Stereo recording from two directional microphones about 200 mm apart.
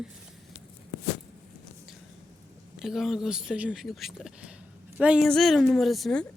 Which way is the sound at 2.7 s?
Centre (ahead or behind).